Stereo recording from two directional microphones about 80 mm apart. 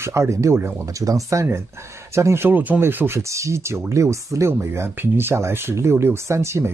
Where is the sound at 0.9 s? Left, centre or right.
Right.